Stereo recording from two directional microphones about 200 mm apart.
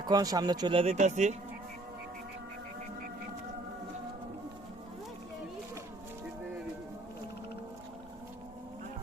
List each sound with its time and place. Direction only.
0.0 s speech: 20° right (ahead or behind); by 1.4 s 35° right (ahead or behind)